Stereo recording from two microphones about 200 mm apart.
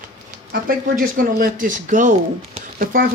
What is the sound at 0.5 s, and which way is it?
Speech, 45° right (ahead or behind).